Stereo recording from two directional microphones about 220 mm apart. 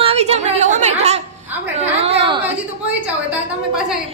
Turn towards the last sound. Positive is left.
turn(degrees=-5)  # may be behind; listen again after turning